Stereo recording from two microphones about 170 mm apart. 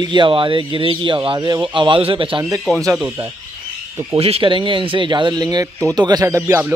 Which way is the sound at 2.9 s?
10° right (ahead or behind).